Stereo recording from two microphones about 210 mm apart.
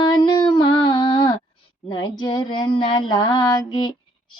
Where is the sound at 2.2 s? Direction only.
20° left (ahead or behind).